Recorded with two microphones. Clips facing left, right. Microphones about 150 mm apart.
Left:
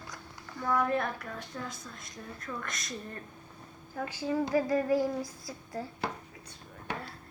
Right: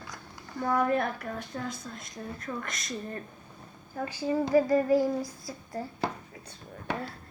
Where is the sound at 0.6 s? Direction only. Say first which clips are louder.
Right 3 dB; 35° right (ahead or behind).